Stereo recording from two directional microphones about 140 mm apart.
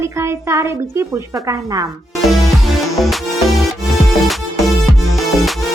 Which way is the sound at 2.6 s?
Centre (ahead or behind).